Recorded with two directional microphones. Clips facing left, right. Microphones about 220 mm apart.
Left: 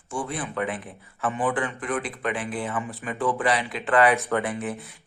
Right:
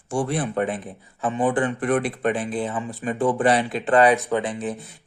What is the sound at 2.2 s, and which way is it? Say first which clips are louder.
Speech: right 3 dB; 45° right (ahead or behind).